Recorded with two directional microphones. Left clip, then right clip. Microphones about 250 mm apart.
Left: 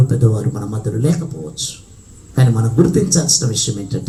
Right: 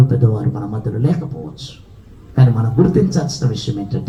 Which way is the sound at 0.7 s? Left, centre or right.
Left.